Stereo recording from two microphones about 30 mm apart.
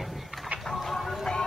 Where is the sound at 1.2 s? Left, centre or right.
Left.